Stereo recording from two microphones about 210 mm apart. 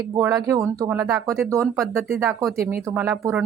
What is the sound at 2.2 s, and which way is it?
Speech, centre (ahead or behind).